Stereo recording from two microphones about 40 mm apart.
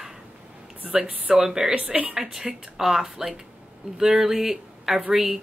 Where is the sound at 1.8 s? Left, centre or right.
Right.